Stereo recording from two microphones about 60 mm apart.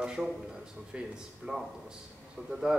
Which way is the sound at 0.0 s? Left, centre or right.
Centre.